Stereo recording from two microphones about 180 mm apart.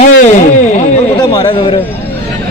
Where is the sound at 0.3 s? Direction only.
40° left (ahead or behind).